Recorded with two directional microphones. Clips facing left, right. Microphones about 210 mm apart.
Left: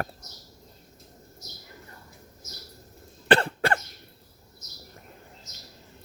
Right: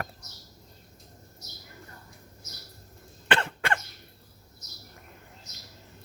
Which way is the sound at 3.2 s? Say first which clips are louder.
Left 6 dB; 35° left (ahead or behind).